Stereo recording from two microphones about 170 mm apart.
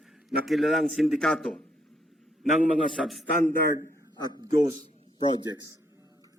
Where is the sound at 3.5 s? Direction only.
15° left (ahead or behind).